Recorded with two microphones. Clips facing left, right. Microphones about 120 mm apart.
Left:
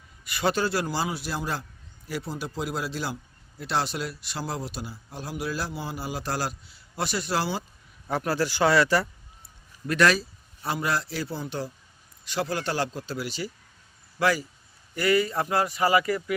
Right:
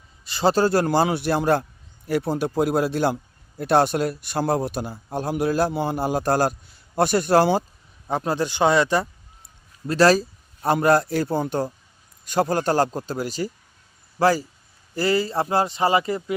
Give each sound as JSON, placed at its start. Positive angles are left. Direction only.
{"t": 0.3, "sound": "a man's voice", "side_deg": -30}
{"t": 8.0, "sound": "speech", "side_deg": -20}
{"t": 9.8, "sound": "a man's voice", "side_deg": -30}